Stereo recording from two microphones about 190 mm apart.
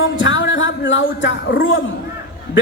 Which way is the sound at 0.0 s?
80° left.